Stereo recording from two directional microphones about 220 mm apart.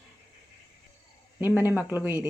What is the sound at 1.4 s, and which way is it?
Speech, 10° right (ahead or behind).